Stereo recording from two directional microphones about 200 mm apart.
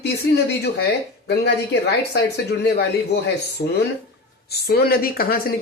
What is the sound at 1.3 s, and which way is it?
Speech, 55° left (ahead or behind).